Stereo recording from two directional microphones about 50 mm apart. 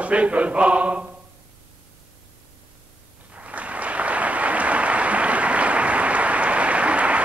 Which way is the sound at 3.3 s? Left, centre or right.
Right.